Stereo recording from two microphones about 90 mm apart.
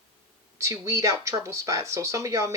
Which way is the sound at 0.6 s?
35° right (ahead or behind).